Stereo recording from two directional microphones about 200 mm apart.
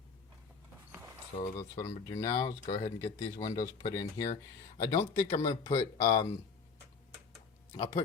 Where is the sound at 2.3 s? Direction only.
25° left (ahead or behind).